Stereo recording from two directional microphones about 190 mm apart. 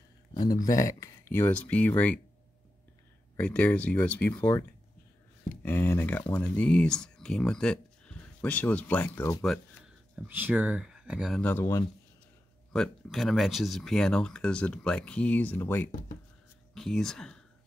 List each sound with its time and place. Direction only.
0.3 s a sound: 20° left (ahead or behind)
0.7 s speech: 15° left (ahead or behind)
3.3 s speech: 5° left (ahead or behind)
10.1 s speech: 10° right (ahead or behind)
11.4 s speech: 15° left (ahead or behind)
12.7 s speech: centre (ahead or behind)